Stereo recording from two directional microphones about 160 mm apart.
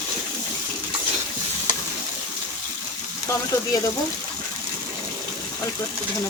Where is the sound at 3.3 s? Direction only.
20° left (ahead or behind).